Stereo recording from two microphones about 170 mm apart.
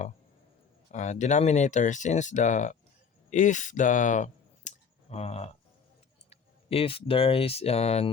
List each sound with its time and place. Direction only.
0.9 s speech: 45° left (ahead or behind)